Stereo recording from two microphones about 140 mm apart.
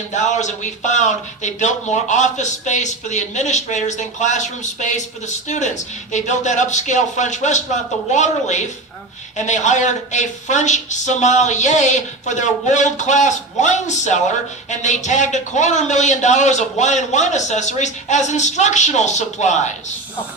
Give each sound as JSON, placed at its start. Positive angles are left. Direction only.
{"t": 0.1, "sound": "a man's voice", "side_deg": 60}